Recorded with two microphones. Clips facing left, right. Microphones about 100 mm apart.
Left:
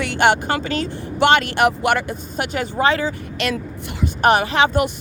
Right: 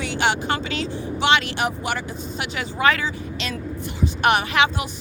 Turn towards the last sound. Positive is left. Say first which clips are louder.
# left 3 dB
turn(degrees=35)  # may be behind; listen again after turning